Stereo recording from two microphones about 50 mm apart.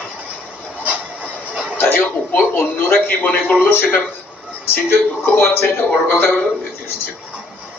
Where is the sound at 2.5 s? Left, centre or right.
Left.